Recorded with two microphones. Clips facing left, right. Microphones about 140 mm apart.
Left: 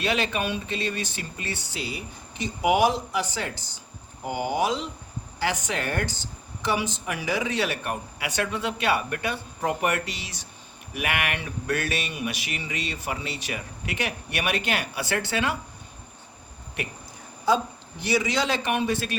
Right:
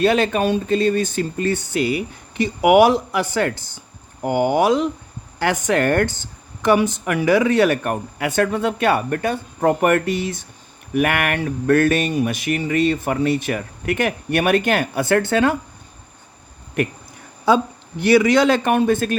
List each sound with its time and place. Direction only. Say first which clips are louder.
0.0 s a man's voice: right 9 dB; 50° right (ahead or behind)
17.4 s a man's voice: right 6 dB; 60° right (ahead or behind)